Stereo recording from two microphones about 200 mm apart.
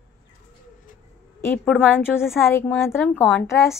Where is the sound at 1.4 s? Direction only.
10° left (ahead or behind).